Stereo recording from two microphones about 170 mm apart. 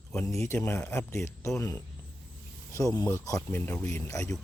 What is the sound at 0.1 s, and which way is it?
A man's voice, 15° left (ahead or behind).